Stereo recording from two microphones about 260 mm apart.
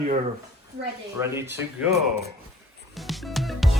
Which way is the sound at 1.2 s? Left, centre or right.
Centre.